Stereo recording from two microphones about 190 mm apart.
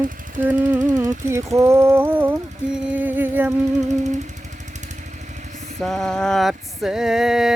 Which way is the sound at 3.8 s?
40° right (ahead or behind).